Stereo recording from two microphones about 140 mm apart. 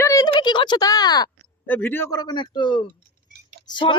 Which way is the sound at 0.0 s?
25° left (ahead or behind).